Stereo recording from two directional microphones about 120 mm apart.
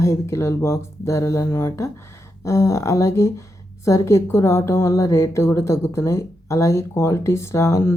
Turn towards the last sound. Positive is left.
turn(degrees=25)  # may be behind; listen again after turning